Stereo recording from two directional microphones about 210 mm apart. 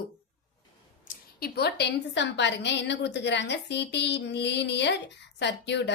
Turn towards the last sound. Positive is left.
turn(degrees=55)  # may be behind; listen again after turning